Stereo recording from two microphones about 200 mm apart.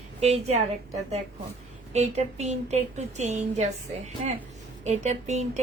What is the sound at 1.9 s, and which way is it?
A woman's voice, 35° right (ahead or behind).